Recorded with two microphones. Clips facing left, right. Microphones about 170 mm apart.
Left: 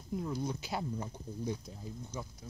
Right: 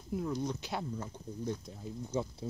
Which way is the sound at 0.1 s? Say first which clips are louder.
Right 2 dB; centre (ahead or behind).